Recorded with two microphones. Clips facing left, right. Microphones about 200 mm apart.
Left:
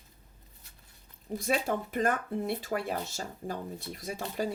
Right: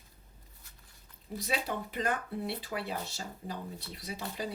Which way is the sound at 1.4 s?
50° left (ahead or behind).